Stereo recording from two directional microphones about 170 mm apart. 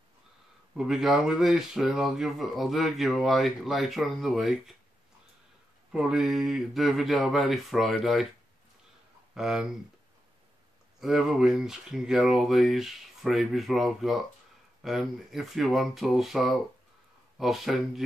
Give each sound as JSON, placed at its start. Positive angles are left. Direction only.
{"t": 0.7, "sound": "speech", "side_deg": 0}
{"t": 5.9, "sound": "speech", "side_deg": -5}
{"t": 9.3, "sound": "speech", "side_deg": -5}
{"t": 11.0, "sound": "speech", "side_deg": 0}